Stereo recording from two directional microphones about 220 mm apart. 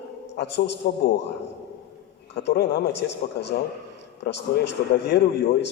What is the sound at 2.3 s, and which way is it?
A man's voice, 50° left (ahead or behind).